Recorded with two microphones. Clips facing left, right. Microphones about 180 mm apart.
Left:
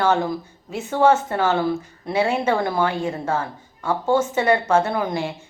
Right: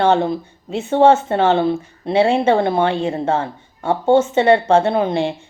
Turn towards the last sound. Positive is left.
turn(degrees=-25)  # may be behind; listen again after turning